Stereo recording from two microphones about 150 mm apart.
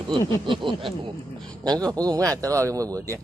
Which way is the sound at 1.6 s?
25° right (ahead or behind).